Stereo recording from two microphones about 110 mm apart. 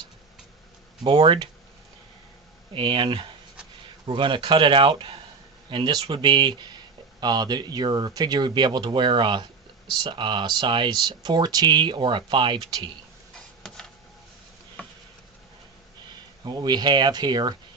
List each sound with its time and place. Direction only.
1.0 s speech: 50° right (ahead or behind)
2.7 s speech: 50° right (ahead or behind)
13.3 s a sound: 5° left (ahead or behind)
16.4 s speech: 40° right (ahead or behind)